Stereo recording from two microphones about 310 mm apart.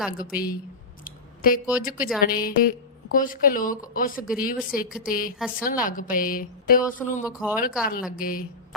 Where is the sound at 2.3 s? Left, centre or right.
Left.